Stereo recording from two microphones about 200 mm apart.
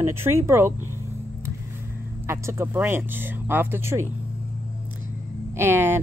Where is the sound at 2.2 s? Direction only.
15° right (ahead or behind).